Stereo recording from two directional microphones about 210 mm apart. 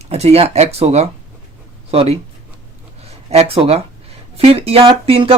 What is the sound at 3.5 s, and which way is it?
Speech, 30° right (ahead or behind).